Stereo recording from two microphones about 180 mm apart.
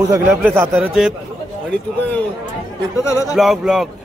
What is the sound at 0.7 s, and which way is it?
Speech, 5° right (ahead or behind).